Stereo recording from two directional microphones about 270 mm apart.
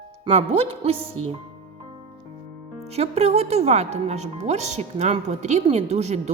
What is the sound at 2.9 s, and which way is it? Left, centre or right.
Speech, right.